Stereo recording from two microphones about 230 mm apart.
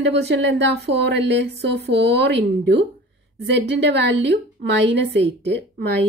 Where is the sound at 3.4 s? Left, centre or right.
Right.